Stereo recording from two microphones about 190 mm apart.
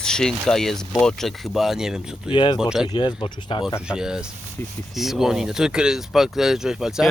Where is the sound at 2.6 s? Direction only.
5° right (ahead or behind).